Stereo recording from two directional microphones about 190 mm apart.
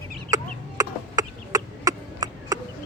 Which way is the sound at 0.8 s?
15° right (ahead or behind).